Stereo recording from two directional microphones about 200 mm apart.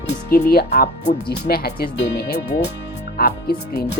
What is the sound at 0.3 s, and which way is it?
Speech, 50° left (ahead or behind).